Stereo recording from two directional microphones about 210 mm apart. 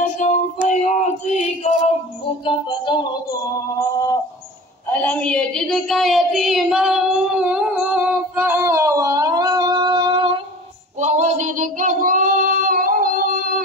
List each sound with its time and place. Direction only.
0.2 s child singing: 35° left (ahead or behind)
2.4 s speech: 20° left (ahead or behind)
3.9 s a sound: 15° left (ahead or behind); by 10.2 s 20° right (ahead or behind)
11.0 s child singing: 35° right (ahead or behind)
12.8 s music: 40° right (ahead or behind)